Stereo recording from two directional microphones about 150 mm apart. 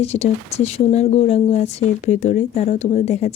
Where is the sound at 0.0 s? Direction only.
45° left (ahead or behind).